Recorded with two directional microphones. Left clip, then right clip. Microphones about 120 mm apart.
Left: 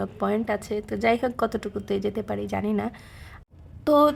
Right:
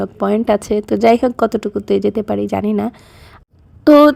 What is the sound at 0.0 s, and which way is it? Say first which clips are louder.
A woman's voice: right 9 dB; 40° right (ahead or behind).